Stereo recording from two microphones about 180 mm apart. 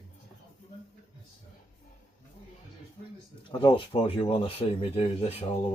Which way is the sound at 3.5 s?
25° left (ahead or behind).